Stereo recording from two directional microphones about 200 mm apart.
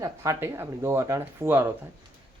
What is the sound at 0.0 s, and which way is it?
Speech, 15° right (ahead or behind).